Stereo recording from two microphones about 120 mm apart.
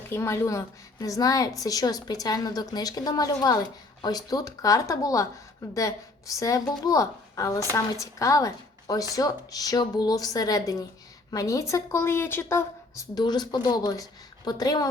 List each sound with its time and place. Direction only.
0.1 s a woman's voice: 20° left (ahead or behind)